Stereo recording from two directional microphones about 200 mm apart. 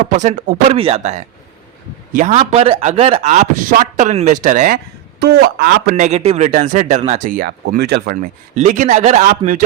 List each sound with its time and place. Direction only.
0.0 s speech: 40° right (ahead or behind)
2.3 s speech: 30° right (ahead or behind)
5.2 s speech: 50° right (ahead or behind)